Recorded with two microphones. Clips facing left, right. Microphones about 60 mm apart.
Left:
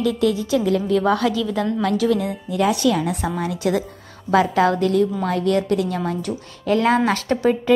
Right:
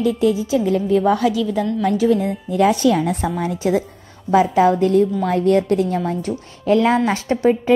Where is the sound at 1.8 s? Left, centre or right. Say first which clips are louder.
Right 3 dB; right.